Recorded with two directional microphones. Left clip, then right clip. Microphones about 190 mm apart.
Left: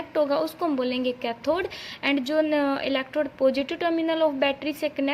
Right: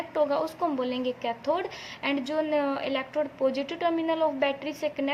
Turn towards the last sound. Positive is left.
turn(degrees=35)  # may be behind; listen again after turning